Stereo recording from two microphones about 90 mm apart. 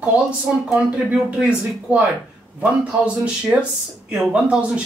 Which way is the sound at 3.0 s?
10° right (ahead or behind).